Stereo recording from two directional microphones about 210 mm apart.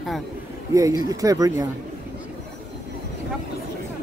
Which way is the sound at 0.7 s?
15° right (ahead or behind).